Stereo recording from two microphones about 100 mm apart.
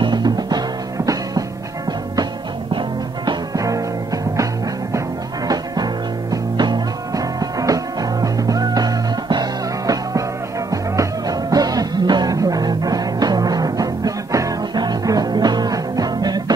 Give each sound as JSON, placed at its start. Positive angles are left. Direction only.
{"t": 0.0, "sound": "music", "side_deg": -45}
{"t": 3.5, "sound": "music", "side_deg": -35}
{"t": 6.3, "sound": "music", "side_deg": -45}